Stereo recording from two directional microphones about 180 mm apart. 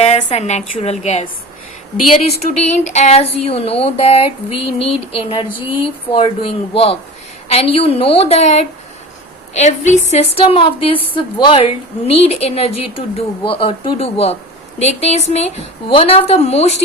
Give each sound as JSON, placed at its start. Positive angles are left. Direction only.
{"t": 0.0, "sound": "speech", "side_deg": 35}
{"t": 2.3, "sound": "speech", "side_deg": 45}